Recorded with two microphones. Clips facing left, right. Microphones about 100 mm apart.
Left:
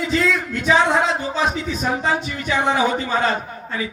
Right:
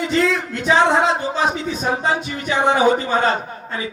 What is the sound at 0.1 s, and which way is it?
A man's voice, 30° right (ahead or behind).